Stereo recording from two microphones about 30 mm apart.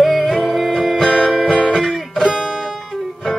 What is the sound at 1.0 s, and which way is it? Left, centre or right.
Music, centre.